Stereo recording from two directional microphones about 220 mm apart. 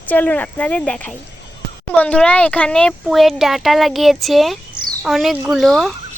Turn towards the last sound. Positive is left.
turn(degrees=0)  # may be behind; listen again after turning